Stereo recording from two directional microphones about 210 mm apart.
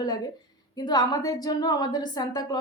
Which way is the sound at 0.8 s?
20° left (ahead or behind).